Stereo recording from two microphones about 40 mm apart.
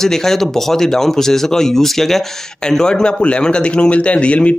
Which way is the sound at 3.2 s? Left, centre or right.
Left.